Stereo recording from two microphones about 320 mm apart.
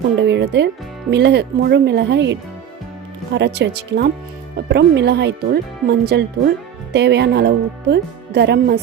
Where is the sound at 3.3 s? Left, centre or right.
Right.